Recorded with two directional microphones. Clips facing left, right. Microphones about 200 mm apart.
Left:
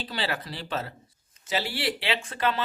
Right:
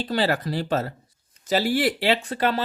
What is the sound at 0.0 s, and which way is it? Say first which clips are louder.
Speech: right 8 dB; 45° right (ahead or behind).